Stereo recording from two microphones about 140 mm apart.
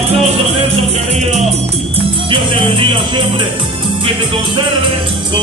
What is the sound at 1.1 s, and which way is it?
Music, 50° right (ahead or behind).